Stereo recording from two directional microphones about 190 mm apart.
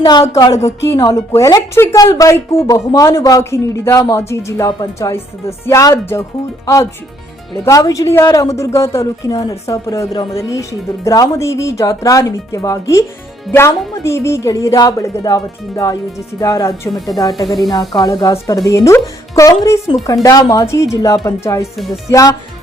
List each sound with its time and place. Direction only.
0.0 s speech: 20° left (ahead or behind)
7.6 s speech: 15° left (ahead or behind)
17.3 s speech: centre (ahead or behind)
17.7 s speech: 20° left (ahead or behind)